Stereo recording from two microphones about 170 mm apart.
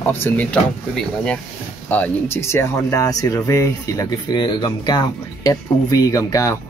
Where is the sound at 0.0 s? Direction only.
10° left (ahead or behind).